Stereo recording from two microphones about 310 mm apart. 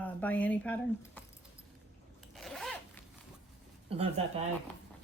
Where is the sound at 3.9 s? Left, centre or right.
Centre.